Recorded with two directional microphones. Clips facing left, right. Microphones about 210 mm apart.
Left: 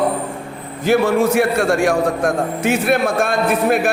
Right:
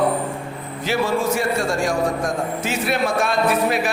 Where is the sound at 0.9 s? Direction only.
60° left (ahead or behind).